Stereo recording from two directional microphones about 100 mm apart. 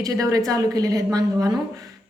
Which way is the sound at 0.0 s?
35° right (ahead or behind).